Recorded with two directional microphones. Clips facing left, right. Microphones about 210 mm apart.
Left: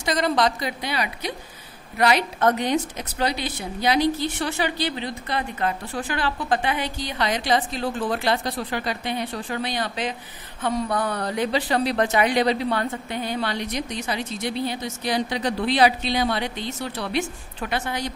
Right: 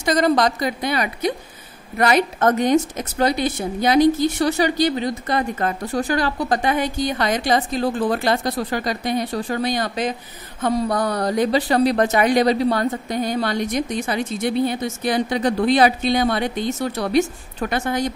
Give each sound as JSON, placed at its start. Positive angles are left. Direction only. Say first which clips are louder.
{"t": 0.0, "sound": "a woman's voice", "louder": "right 4 dB", "side_deg": -45}